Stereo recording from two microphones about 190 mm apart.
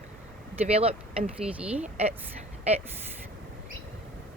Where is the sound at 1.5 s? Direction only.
5° right (ahead or behind).